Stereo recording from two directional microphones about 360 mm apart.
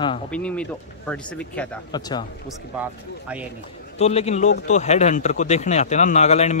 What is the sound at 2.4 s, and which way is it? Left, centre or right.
Speech, centre.